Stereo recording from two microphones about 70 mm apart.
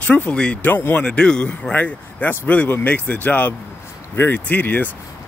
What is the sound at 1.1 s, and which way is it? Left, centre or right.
Speech, centre.